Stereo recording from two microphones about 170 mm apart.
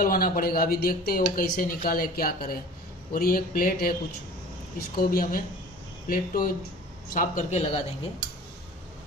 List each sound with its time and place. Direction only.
0.0 s speech: 60° left (ahead or behind)
7.2 s a man's voice: 45° left (ahead or behind)